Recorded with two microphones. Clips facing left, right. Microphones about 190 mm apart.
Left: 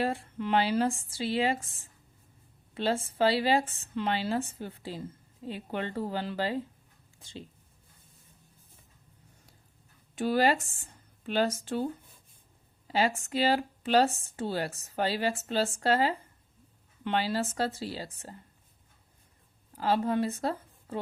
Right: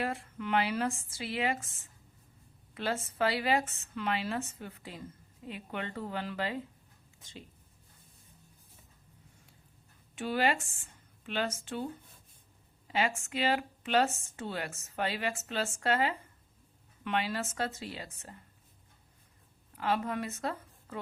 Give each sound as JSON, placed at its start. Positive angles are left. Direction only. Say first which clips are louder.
{"t": 0.0, "sound": "speech", "louder": "left 4 dB", "side_deg": 30}
{"t": 10.2, "sound": "speech", "louder": "left 5 dB", "side_deg": 35}
{"t": 12.9, "sound": "speech", "louder": "left 4 dB", "side_deg": 35}
{"t": 19.7, "sound": "a woman's voice", "louder": "left 5 dB", "side_deg": 35}